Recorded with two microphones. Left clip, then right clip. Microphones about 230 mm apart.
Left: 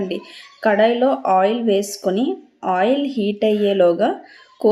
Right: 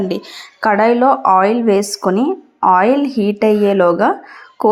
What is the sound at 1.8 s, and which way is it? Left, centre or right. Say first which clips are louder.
Speech: right 5 dB; centre.